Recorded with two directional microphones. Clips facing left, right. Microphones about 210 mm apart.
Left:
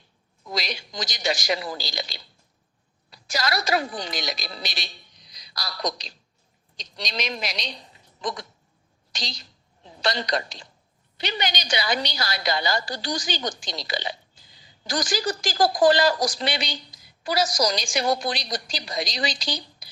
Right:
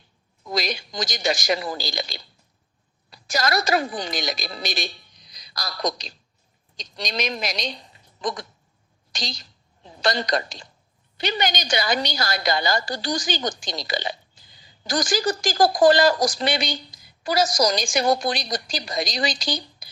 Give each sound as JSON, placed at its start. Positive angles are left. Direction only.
{"t": 0.5, "sound": "a woman's voice", "side_deg": -45}